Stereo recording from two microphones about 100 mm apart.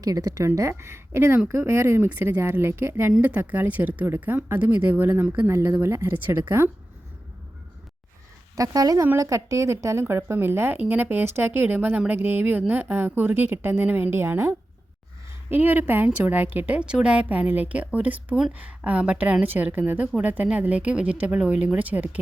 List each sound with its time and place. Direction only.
0.0 s a woman's voice: 35° right (ahead or behind); by 6.7 s 20° right (ahead or behind)
8.5 s a woman's voice: 35° right (ahead or behind); by 22.2 s 15° right (ahead or behind)